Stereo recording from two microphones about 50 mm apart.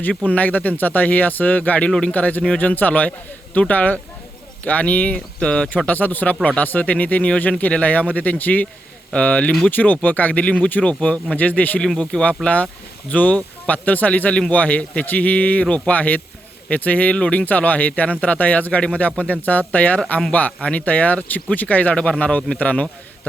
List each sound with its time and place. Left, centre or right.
0.1 s speech: left
1.9 s a man's voice: centre
2.1 s speech: left
11.3 s speech: left
17.2 s speech: left
17.4 s speech: left